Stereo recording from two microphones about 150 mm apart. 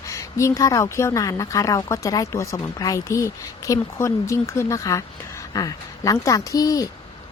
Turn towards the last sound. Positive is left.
turn(degrees=25)  # may be behind; listen again after turning